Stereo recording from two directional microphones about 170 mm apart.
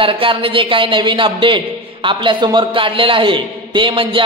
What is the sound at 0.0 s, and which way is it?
A man's voice, 30° right (ahead or behind).